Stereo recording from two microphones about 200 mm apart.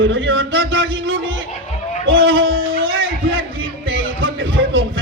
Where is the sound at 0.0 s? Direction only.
70° right (ahead or behind).